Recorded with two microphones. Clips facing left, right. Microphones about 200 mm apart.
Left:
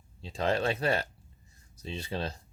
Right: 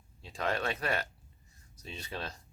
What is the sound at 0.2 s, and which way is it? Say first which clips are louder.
Speech: left 5 dB; 30° left (ahead or behind).